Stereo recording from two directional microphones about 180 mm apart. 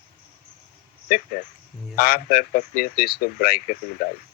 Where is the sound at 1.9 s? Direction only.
55° left (ahead or behind).